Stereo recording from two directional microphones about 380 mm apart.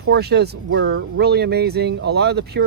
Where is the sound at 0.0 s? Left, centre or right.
Right.